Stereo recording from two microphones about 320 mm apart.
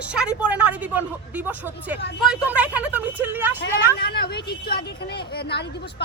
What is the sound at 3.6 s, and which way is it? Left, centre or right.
A woman's voice, left.